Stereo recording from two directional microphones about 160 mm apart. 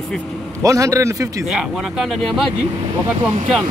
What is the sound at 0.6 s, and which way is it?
Speech, 20° right (ahead or behind).